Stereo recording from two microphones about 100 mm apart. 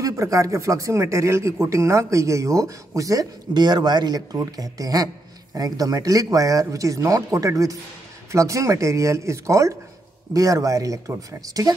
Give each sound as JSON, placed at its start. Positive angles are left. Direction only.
{"t": 0.0, "sound": "speech", "side_deg": -35}